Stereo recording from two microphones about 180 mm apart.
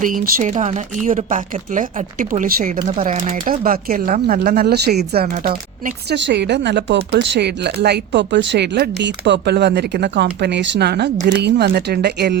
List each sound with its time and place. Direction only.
0.0 s speech: 50° right (ahead or behind)
3.3 s speech: 50° right (ahead or behind)
5.3 s speech: 45° right (ahead or behind)
6.1 s speech: 75° right (ahead or behind)